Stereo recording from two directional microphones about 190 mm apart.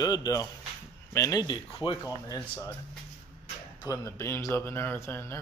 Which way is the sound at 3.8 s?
15° left (ahead or behind).